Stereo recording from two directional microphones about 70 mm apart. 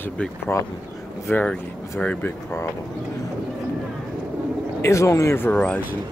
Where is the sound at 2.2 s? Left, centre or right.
Left.